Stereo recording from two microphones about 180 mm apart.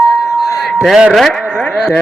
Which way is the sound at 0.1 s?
Centre (ahead or behind).